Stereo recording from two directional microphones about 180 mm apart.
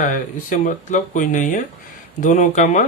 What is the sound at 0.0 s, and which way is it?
Speech, 45° left (ahead or behind).